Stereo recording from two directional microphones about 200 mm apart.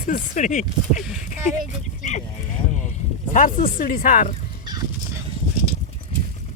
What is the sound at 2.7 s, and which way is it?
Speech, 40° left (ahead or behind).